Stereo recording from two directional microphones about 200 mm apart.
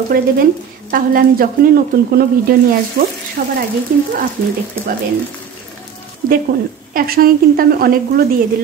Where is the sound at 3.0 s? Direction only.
45° right (ahead or behind).